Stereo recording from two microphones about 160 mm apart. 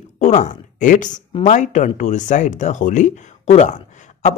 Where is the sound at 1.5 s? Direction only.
50° left (ahead or behind).